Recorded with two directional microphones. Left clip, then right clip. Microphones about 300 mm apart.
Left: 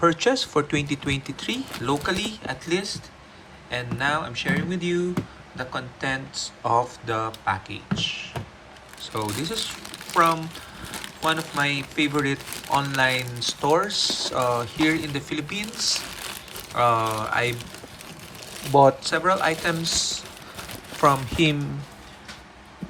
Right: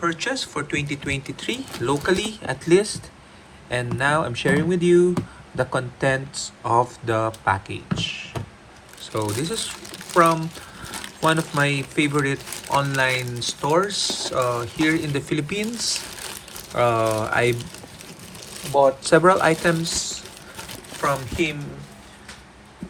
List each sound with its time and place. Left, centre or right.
0.0 s speech: centre
19.0 s speech: centre
20.0 s a sound: centre
21.0 s speech: centre